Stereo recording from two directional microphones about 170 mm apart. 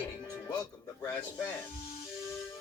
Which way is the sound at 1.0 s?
15° left (ahead or behind).